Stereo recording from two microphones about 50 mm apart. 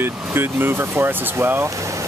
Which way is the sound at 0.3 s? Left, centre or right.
Right.